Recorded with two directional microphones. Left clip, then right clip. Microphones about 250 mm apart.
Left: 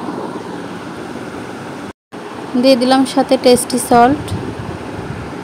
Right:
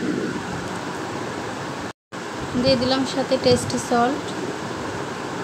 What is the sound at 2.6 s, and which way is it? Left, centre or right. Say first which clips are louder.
Speech: left 9 dB; left.